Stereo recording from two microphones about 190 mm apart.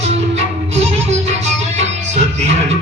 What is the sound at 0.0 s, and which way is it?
Music, 35° right (ahead or behind).